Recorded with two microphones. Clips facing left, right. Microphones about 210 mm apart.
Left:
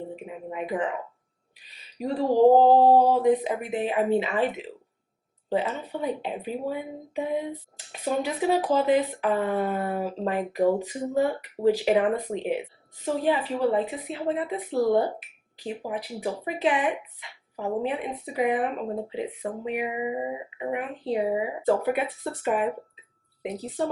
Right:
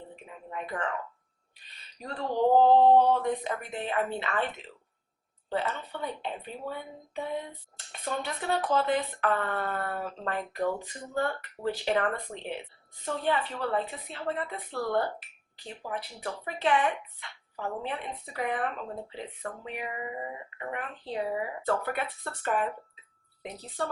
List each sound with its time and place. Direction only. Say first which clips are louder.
0.2 s speech: left 6 dB; 10° left (ahead or behind)
2.2 s male singing: left 5 dB; 35° left (ahead or behind)
3.1 s speech: left 6 dB; 5° left (ahead or behind)